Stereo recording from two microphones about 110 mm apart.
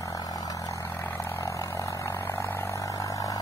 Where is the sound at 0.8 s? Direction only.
20° left (ahead or behind).